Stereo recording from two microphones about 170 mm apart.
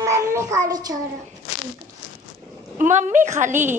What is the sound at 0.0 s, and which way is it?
Child singing, 15° right (ahead or behind).